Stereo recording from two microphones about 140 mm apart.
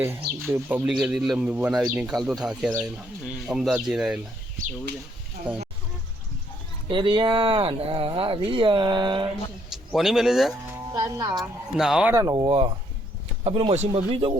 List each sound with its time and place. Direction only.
0.4 s speech: 15° right (ahead or behind)
0.9 s a man's voice: 5° right (ahead or behind)
6.8 s speech: 35° right (ahead or behind)
9.7 s speech: centre (ahead or behind)
10.9 s speech: 25° right (ahead or behind)
11.3 s a man's voice: 5° right (ahead or behind)
12.1 s speech: 30° right (ahead or behind)
12.5 s speech: 45° right (ahead or behind)